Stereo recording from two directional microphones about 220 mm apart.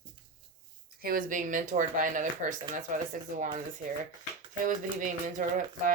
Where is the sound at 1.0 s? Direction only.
40° right (ahead or behind).